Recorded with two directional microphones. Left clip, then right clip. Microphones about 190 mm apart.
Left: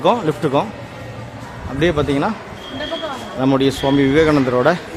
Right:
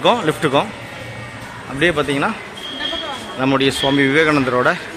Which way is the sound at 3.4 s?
15° left (ahead or behind).